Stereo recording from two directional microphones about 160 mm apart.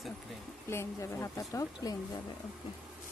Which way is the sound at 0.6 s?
15° left (ahead or behind).